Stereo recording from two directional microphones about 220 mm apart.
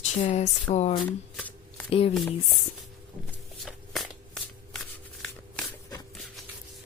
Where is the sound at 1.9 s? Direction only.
25° left (ahead or behind).